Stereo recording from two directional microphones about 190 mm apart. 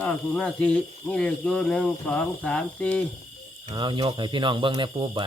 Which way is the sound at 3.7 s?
25° right (ahead or behind).